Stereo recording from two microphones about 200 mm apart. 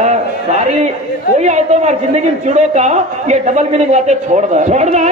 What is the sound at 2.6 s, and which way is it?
A man's voice, 35° right (ahead or behind).